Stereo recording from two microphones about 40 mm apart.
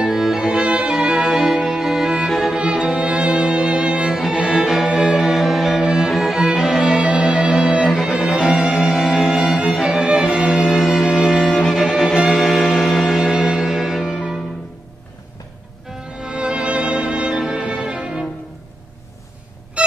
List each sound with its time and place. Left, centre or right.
0.0 s music: centre
0.6 s music: centre
1.2 s music: centre
16.2 s music: centre